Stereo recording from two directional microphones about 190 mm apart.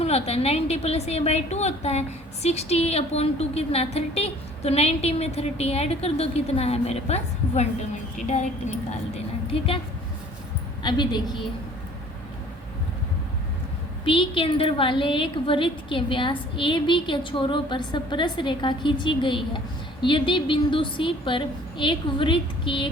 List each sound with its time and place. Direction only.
0.0 s a woman's voice: 35° left (ahead or behind)
10.8 s a woman's voice: 25° left (ahead or behind)
14.0 s a woman's voice: 25° left (ahead or behind)